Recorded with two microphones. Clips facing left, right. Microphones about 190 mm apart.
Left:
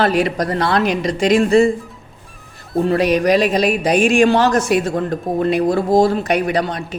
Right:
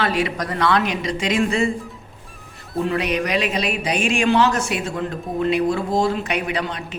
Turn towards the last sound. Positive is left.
turn(degrees=40)  # may be behind; listen again after turning